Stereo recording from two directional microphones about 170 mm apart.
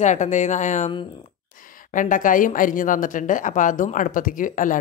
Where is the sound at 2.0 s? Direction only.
50° left (ahead or behind).